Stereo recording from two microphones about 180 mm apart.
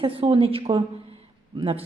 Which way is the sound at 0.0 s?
30° right (ahead or behind).